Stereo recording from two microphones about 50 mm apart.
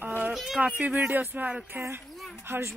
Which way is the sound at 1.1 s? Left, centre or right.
Right.